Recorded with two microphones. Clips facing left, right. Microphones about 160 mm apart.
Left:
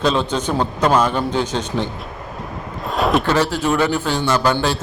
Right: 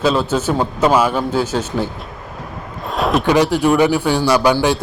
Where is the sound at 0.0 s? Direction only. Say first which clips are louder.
Right 2 dB; 5° right (ahead or behind).